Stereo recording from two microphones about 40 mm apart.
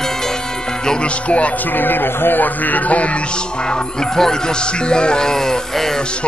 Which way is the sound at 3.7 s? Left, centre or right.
Centre.